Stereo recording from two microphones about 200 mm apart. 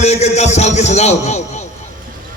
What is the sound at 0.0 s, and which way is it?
A man's voice, 35° left (ahead or behind).